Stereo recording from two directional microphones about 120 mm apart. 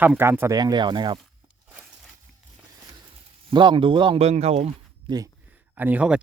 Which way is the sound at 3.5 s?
40° right (ahead or behind).